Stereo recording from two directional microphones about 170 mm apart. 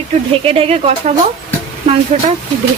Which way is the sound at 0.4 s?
35° right (ahead or behind).